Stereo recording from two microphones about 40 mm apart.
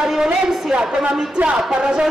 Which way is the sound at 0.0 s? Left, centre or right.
Centre.